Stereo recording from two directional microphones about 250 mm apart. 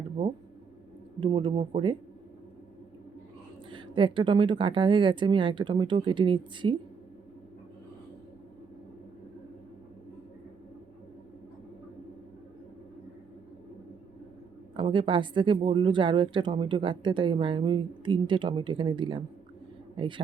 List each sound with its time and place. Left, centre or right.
1.2 s speech: centre
3.7 s speech: centre
14.8 s speech: centre